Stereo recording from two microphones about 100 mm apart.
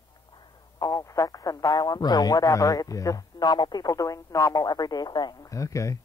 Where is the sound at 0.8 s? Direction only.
35° left (ahead or behind).